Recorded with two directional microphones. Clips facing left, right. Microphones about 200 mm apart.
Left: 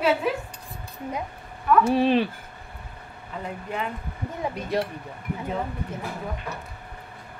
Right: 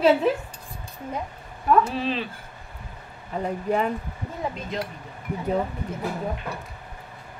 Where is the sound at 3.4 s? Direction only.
40° right (ahead or behind).